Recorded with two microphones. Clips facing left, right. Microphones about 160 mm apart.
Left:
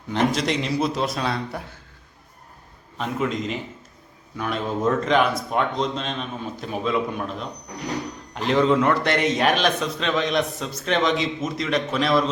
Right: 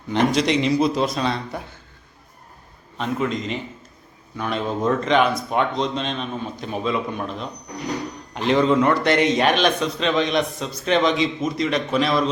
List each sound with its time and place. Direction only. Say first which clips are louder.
0.3 s a man's voice: right 5 dB; centre (ahead or behind)
3.0 s a man's voice: right 1 dB; 5° left (ahead or behind)